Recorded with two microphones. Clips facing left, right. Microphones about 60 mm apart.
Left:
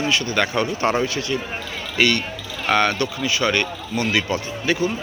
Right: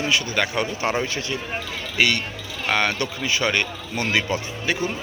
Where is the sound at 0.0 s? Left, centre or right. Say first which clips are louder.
Left 2 dB; centre.